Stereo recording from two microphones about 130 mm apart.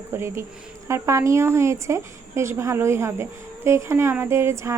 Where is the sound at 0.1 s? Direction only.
20° right (ahead or behind).